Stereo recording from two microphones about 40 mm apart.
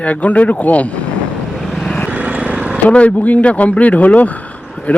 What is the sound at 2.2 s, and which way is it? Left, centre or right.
Vehicle, right.